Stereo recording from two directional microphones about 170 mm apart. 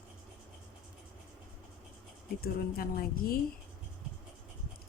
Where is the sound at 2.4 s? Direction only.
60° left (ahead or behind).